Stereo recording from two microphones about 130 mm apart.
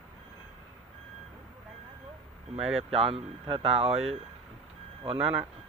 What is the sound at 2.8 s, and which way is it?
Speech, 50° right (ahead or behind).